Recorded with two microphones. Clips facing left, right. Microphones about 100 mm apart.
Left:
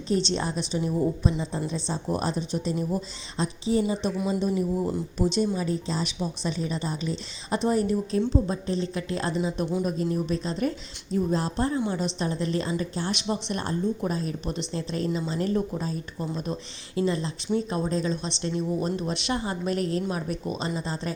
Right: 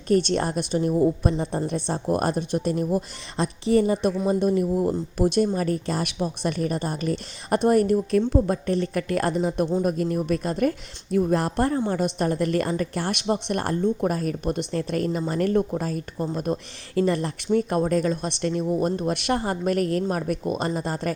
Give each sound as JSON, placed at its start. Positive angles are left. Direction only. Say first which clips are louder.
{"t": 0.1, "sound": "a woman's voice", "louder": "right 5 dB", "side_deg": -55}
{"t": 3.3, "sound": "a woman's voice", "louder": "right 4 dB", "side_deg": -65}
{"t": 13.2, "sound": "a woman's voice", "louder": "right 4 dB", "side_deg": -45}